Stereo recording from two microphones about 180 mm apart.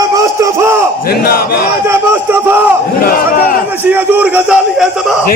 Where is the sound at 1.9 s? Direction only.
15° right (ahead or behind).